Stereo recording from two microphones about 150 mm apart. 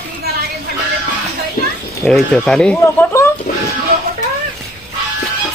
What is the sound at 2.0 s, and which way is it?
Speech, 5° left (ahead or behind).